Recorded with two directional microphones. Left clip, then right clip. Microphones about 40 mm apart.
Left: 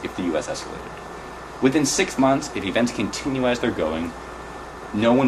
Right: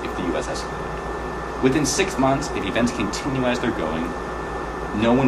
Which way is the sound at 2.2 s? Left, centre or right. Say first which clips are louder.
Even; centre.